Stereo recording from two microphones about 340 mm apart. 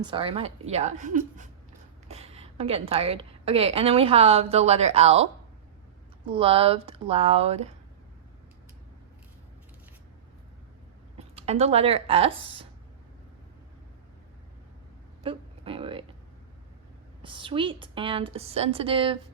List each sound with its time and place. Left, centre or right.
0.0 s a woman's voice: centre
11.4 s a woman's voice: centre
15.2 s a sound: centre
17.2 s a woman's voice: centre